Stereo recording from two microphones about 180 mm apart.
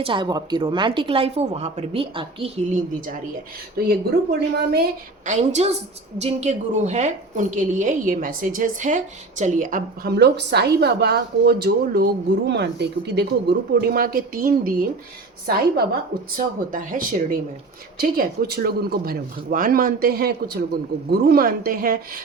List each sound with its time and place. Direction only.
0.0 s a woman's voice: 25° right (ahead or behind)
3.8 s speech: 60° right (ahead or behind)
5.2 s a woman's voice: 40° right (ahead or behind); by 13.2 s 70° right (ahead or behind)
13.8 s a woman's voice: 55° right (ahead or behind)